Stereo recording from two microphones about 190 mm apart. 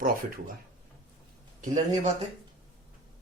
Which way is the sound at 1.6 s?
35° right (ahead or behind).